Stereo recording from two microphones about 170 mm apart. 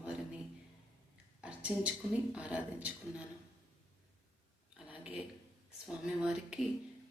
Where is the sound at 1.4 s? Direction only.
5° right (ahead or behind).